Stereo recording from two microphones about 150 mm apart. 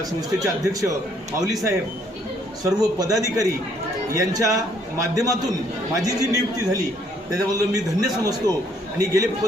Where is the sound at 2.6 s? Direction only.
25° right (ahead or behind).